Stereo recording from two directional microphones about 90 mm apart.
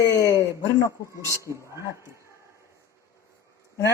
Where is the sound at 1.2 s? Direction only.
35° right (ahead or behind).